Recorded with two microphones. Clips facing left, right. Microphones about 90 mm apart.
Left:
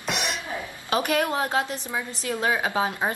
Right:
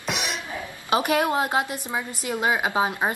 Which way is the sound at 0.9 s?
20° right (ahead or behind).